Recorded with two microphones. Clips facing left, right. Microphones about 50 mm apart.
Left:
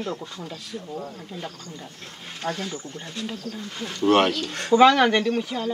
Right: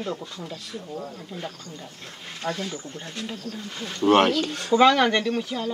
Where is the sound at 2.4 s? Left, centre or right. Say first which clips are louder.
Even; left.